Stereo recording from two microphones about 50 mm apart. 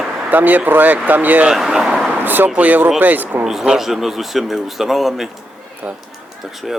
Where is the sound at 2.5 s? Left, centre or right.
Right.